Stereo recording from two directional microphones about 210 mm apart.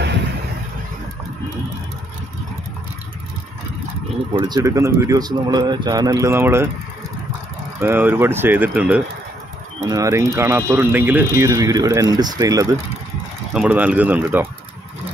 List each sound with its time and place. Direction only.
4.3 s speech: 20° right (ahead or behind)
7.8 s speech: 10° right (ahead or behind)
13.5 s speech: 5° right (ahead or behind)